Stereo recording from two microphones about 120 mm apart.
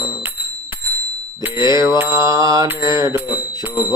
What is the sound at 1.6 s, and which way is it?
Mantra, 30° right (ahead or behind).